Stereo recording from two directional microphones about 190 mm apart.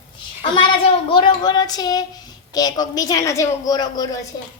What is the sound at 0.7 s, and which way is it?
Speech, 25° left (ahead or behind).